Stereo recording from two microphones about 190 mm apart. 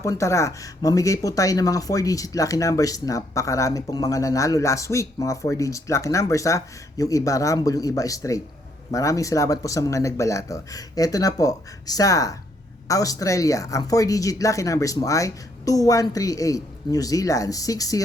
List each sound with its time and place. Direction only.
0.0 s speech: 15° left (ahead or behind)